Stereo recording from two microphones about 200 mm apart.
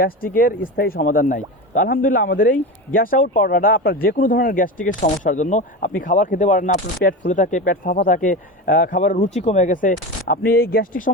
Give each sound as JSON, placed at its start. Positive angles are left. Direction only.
{"t": 0.3, "sound": "speech", "side_deg": 45}